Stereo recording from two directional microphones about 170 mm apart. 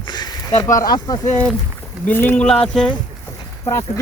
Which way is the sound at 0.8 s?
20° left (ahead or behind).